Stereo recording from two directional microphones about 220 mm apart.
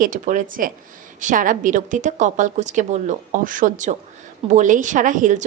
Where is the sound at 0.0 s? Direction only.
35° right (ahead or behind).